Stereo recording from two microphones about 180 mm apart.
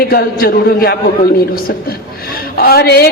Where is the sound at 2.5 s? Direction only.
60° left (ahead or behind).